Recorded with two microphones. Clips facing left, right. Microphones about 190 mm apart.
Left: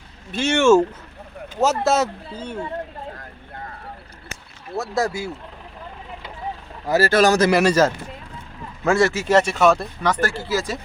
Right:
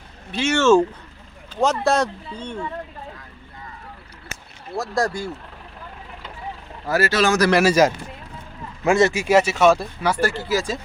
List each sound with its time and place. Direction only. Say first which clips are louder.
0.3 s speech: even; 45° left (ahead or behind)
0.5 s speech: left 1 dB; 10° left (ahead or behind)
3.2 s vehicle: left 5 dB; 60° left (ahead or behind)
4.8 s speech: even; 5° left (ahead or behind)
7.1 s speech: left 5 dB; 45° left (ahead or behind)
7.5 s speech: even; 5° right (ahead or behind)